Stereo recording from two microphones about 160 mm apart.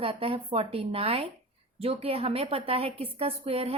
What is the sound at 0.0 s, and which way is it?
A woman's voice, 35° right (ahead or behind).